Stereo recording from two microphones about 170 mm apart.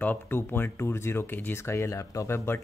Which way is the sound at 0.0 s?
10° left (ahead or behind).